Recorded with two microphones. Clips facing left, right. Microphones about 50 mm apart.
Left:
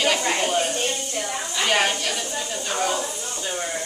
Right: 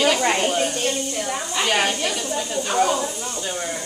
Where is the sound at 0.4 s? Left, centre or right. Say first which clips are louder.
Right 1 dB; centre.